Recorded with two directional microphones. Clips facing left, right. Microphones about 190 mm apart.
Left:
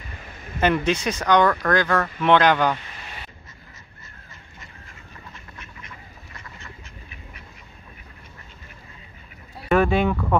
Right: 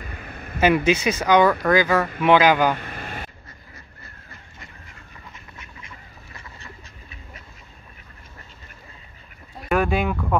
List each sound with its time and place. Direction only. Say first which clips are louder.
0.6 s speech: right 3 dB; 5° right (ahead or behind)
2.8 s vehicle: right 7 dB; 55° right (ahead or behind)
9.7 s speech: left 2 dB; 5° right (ahead or behind)